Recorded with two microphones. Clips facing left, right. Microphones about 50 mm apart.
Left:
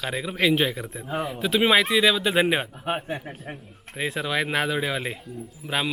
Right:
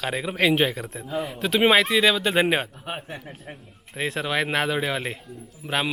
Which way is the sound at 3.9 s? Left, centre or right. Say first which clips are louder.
Right 1 dB; centre.